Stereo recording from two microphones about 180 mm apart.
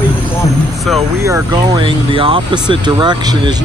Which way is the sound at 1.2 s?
20° right (ahead or behind).